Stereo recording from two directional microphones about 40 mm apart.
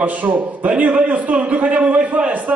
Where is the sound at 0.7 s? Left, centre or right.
Right.